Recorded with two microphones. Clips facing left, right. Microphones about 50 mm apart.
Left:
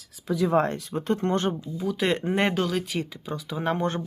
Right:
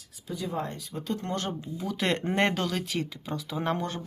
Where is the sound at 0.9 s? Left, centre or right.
Left.